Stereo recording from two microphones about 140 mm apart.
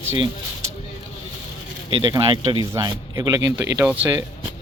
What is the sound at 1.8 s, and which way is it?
Speech, 35° right (ahead or behind).